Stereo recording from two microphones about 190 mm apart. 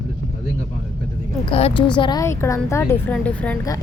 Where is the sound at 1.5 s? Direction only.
30° left (ahead or behind).